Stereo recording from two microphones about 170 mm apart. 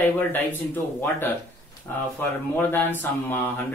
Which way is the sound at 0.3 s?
10° left (ahead or behind).